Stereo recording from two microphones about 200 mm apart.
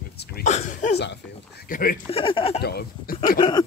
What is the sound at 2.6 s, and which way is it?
Speech, 50° left (ahead or behind).